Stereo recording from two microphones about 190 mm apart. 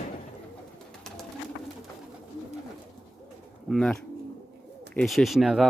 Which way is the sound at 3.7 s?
5° left (ahead or behind).